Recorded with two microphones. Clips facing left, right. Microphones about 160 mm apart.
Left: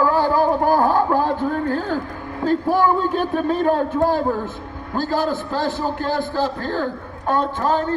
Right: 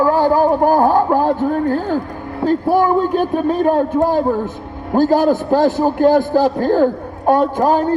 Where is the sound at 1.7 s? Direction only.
15° right (ahead or behind).